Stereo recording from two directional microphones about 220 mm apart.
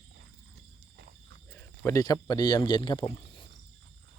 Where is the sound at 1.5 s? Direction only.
10° left (ahead or behind).